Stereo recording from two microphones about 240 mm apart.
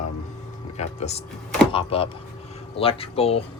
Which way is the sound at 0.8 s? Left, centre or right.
Left.